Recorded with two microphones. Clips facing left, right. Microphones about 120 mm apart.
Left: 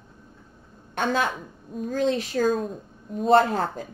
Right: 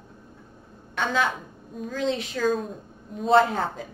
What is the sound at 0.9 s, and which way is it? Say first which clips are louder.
A woman's voice: left 1 dB; 45° left (ahead or behind).